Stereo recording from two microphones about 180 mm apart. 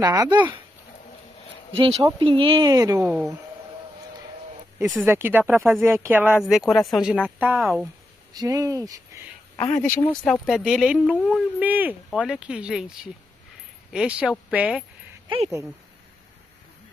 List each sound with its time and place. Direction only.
0.0 s speech: 20° right (ahead or behind)
1.7 s speech: 30° right (ahead or behind); by 3.3 s 10° right (ahead or behind)
5.0 s speech: 10° right (ahead or behind)
8.3 s speech: 20° right (ahead or behind)
10.0 s speech: 5° left (ahead or behind)
15.2 s speech: 30° right (ahead or behind)